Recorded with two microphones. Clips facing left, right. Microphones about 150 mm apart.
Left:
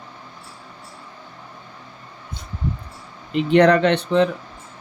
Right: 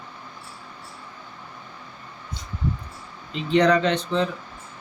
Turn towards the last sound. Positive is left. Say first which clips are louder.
# left 6 dB
turn(degrees=65)  # may be behind; listen again after turning